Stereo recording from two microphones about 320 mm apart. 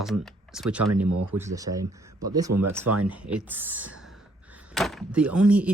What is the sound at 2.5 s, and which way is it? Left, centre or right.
Speech, right.